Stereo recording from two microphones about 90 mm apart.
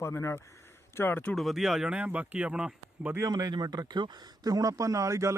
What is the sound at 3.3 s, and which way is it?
A man's voice, 45° right (ahead or behind).